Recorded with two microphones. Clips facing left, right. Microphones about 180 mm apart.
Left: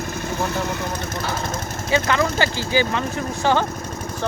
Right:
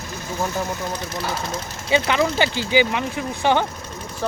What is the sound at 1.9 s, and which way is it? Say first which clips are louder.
Speech: right 1 dB; 15° right (ahead or behind).